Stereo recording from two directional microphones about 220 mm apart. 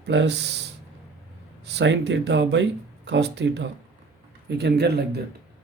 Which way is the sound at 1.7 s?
50° right (ahead or behind).